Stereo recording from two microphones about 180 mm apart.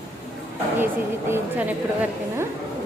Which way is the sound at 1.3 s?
10° right (ahead or behind).